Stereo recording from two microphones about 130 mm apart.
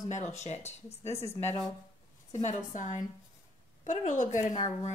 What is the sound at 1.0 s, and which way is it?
Speech, 20° left (ahead or behind).